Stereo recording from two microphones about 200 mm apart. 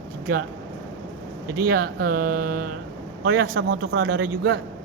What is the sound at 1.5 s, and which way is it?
Speech, 45° right (ahead or behind).